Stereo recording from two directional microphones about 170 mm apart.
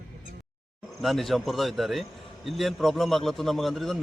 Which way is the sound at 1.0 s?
Centre (ahead or behind).